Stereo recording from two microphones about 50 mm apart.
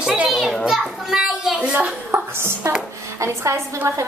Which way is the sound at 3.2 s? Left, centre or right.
Right.